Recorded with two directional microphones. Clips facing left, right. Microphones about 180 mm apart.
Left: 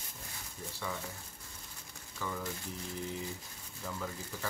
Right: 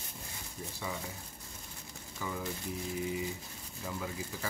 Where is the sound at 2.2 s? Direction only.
10° right (ahead or behind).